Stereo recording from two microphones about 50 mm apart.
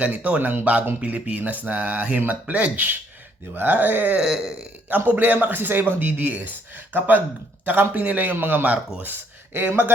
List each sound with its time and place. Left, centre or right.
0.0 s speech: right
4.2 s speech: centre
4.9 s speech: right